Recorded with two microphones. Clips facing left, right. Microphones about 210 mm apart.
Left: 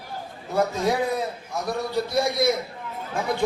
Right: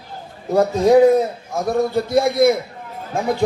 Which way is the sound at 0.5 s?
40° right (ahead or behind).